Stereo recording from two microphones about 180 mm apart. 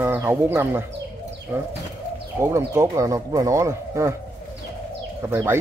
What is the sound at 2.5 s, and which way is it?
Speech, 15° right (ahead or behind).